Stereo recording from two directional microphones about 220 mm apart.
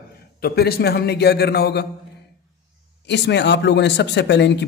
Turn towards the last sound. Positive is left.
turn(degrees=50)  # may be behind; listen again after turning